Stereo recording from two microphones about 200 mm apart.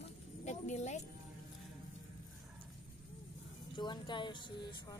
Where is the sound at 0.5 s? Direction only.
35° left (ahead or behind).